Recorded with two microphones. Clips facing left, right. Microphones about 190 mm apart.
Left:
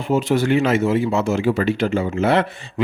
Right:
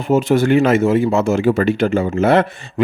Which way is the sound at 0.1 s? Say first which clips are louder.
Right 4 dB; 50° right (ahead or behind).